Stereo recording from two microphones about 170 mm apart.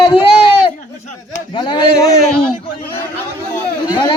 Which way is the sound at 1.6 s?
30° left (ahead or behind).